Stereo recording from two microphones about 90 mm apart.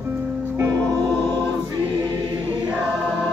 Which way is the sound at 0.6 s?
40° right (ahead or behind).